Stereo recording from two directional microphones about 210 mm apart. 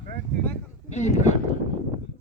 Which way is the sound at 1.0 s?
35° left (ahead or behind).